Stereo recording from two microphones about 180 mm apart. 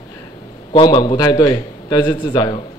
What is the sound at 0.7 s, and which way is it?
A man's voice, 25° left (ahead or behind).